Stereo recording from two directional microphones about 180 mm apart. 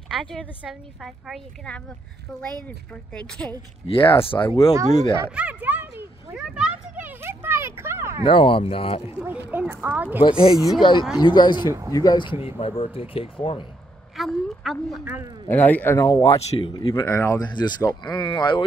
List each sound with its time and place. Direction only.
0.1 s a woman's voice: centre (ahead or behind)
2.9 s a woman's voice: 5° left (ahead or behind)
3.8 s speech: 30° left (ahead or behind)
5.3 s a sound: 10° right (ahead or behind)
8.2 s speech: 30° left (ahead or behind)
9.2 s speech: 10° right (ahead or behind)
10.2 s speech: 30° left (ahead or behind)
14.1 s a sound: centre (ahead or behind)
15.4 s speech: 10° left (ahead or behind)
16.3 s speech: 35° left (ahead or behind)
16.7 s speech: 15° left (ahead or behind)